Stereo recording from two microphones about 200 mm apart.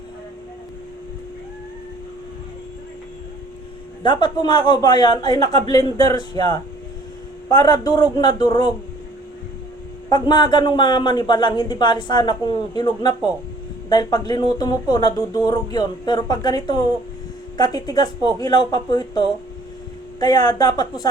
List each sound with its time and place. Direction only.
4.0 s speech: 20° left (ahead or behind)
10.1 s speech: 20° left (ahead or behind)